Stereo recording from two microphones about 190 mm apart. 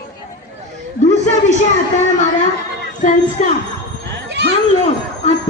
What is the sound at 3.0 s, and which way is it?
Speech, 40° left (ahead or behind).